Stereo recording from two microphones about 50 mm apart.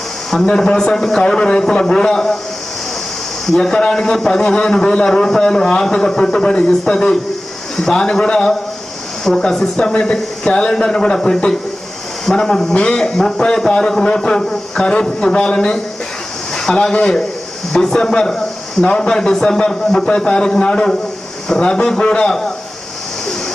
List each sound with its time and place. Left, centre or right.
0.5 s a man's voice: centre
3.4 s a man's voice: centre
16.8 s a man's voice: centre